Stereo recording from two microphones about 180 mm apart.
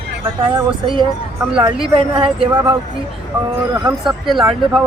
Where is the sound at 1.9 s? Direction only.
30° right (ahead or behind).